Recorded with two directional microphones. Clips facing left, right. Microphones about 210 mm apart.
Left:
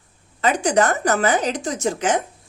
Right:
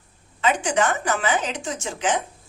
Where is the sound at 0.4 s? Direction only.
40° left (ahead or behind).